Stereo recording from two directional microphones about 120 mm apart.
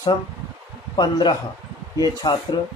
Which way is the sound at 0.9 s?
40° left (ahead or behind).